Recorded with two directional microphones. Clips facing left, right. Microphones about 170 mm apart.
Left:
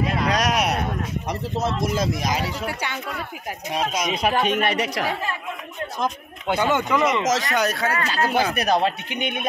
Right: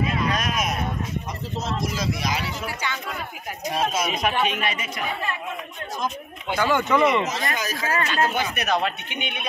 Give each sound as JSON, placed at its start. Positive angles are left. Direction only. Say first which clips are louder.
{"t": 0.2, "sound": "speech", "louder": "left 4 dB", "side_deg": 80}
{"t": 1.6, "sound": "speech", "louder": "left 4 dB", "side_deg": 60}
{"t": 3.7, "sound": "speech", "louder": "even", "side_deg": 15}
{"t": 4.2, "sound": "speech", "louder": "left 6 dB", "side_deg": 40}
{"t": 6.5, "sound": "speech", "louder": "even", "side_deg": 20}
{"t": 7.2, "sound": "speech", "louder": "left 6 dB", "side_deg": 80}
{"t": 8.0, "sound": "a man's voice", "louder": "left 1 dB", "side_deg": 35}